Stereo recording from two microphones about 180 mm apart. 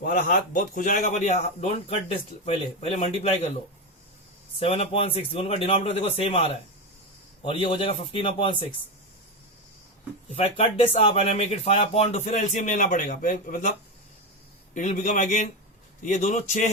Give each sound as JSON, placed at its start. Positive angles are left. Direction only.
{"t": 0.0, "sound": "speech", "side_deg": 50}
{"t": 4.6, "sound": "speech", "side_deg": 35}
{"t": 10.3, "sound": "speech", "side_deg": 35}